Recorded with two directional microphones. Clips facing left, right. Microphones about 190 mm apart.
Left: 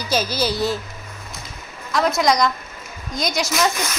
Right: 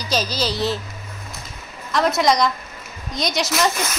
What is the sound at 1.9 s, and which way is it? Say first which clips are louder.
Speech: even; centre (ahead or behind).